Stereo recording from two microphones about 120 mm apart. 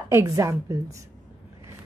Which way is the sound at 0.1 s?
25° right (ahead or behind).